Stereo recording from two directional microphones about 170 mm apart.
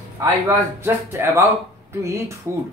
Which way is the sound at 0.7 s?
15° right (ahead or behind).